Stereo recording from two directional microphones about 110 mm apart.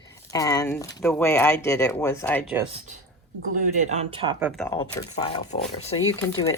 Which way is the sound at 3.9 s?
80° right.